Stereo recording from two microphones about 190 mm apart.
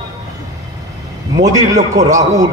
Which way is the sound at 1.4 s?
20° right (ahead or behind).